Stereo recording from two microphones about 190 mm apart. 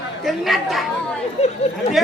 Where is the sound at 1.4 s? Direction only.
35° left (ahead or behind).